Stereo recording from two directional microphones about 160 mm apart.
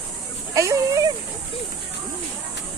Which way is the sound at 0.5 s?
20° right (ahead or behind).